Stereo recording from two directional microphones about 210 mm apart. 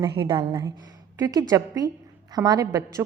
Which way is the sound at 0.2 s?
20° right (ahead or behind).